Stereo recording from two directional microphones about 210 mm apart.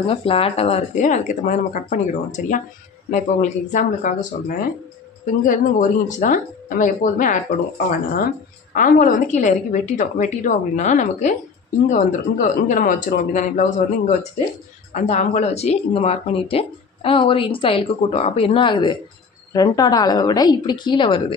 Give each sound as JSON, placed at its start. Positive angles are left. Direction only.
{"t": 0.0, "sound": "speech", "side_deg": 25}